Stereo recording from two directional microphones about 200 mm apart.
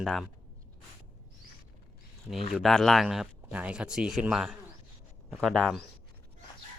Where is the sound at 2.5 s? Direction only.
Centre (ahead or behind).